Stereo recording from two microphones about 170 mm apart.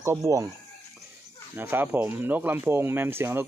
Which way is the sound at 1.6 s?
10° right (ahead or behind).